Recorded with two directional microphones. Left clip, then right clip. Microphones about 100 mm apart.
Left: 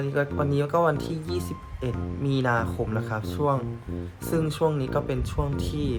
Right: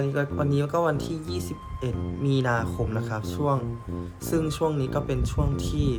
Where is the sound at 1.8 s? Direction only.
25° right (ahead or behind).